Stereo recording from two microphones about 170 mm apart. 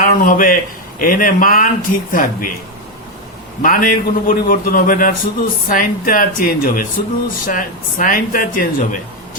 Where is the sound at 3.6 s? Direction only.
55° left (ahead or behind).